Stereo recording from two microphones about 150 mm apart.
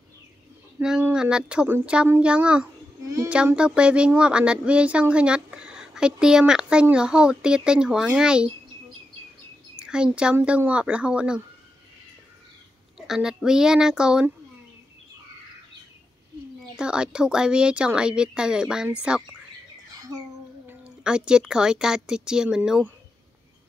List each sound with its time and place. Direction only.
0.7 s speech: 10° right (ahead or behind)
9.8 s speech: 5° right (ahead or behind)
12.9 s speech: 5° right (ahead or behind)
16.7 s speech: 5° right (ahead or behind)
20.6 s speech: 5° right (ahead or behind)